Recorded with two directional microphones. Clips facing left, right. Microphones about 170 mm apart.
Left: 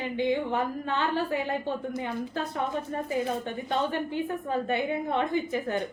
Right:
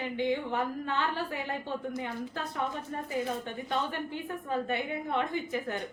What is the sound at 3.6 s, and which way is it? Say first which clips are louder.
Speech: left 5 dB; 25° left (ahead or behind).